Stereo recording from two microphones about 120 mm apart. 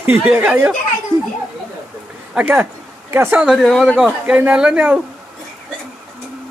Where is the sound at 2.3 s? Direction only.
15° right (ahead or behind).